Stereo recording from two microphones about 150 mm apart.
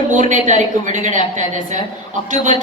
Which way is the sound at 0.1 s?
55° right (ahead or behind).